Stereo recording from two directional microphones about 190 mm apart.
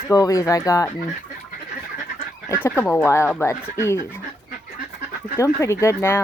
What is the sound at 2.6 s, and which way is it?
Speech, 15° left (ahead or behind).